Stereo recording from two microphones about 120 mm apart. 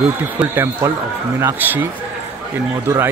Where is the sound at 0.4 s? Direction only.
20° right (ahead or behind).